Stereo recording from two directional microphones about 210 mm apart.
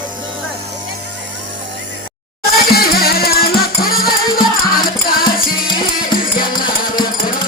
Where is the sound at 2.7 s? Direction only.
45° left (ahead or behind).